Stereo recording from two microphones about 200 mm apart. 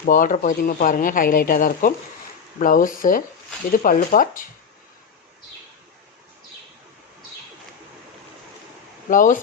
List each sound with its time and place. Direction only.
0.0 s speech: 45° left (ahead or behind)
9.0 s speech: 40° left (ahead or behind)